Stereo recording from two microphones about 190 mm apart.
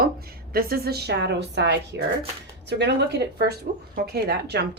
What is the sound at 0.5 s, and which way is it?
Speech, 55° right (ahead or behind).